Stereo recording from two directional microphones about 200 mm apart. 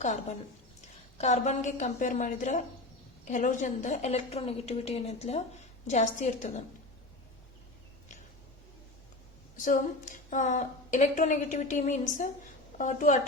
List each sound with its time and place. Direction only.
0.0 s a woman's voice: 35° left (ahead or behind)
9.6 s a woman's voice: 40° left (ahead or behind)